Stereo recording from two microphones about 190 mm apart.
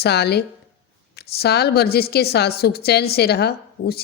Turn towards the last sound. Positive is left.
turn(degrees=55)  # may be behind; listen again after turning